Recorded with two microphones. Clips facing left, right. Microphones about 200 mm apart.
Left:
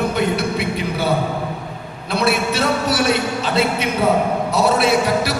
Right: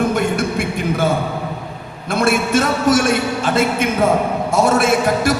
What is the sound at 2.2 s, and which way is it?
Music, 50° right (ahead or behind).